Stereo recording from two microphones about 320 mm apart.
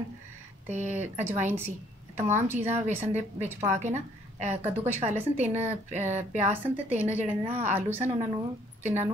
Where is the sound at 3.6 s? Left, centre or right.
Right.